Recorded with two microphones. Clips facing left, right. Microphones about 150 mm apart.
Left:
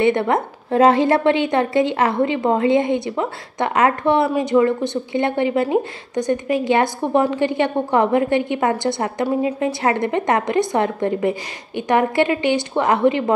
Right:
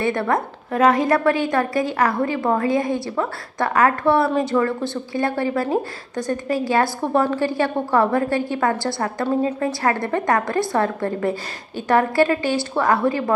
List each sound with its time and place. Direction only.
0.0 s a woman's voice: 20° left (ahead or behind)